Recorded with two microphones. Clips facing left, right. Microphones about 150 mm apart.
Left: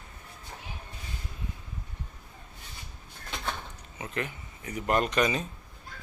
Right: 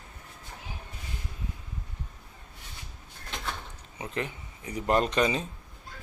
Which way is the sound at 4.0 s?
25° right (ahead or behind).